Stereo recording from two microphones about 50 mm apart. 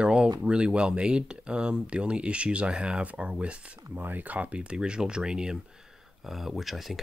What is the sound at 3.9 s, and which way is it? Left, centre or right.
Speech, right.